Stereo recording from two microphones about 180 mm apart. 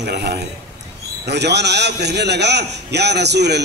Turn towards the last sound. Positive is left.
turn(degrees=-70)  # may be behind; listen again after turning